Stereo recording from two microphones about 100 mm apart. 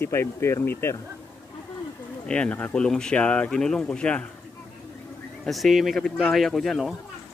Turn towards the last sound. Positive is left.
turn(degrees=0)  # may be behind; listen again after turning